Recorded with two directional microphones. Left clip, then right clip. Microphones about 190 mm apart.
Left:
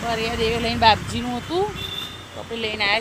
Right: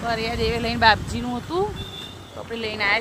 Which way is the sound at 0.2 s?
15° left (ahead or behind).